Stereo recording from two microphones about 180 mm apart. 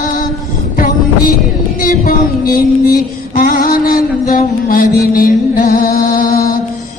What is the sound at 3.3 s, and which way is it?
Mantra, 50° left (ahead or behind).